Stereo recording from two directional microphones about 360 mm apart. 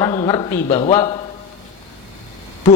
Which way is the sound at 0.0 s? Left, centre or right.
Centre.